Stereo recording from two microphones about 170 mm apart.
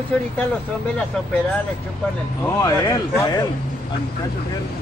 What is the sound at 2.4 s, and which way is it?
Speech, 20° left (ahead or behind).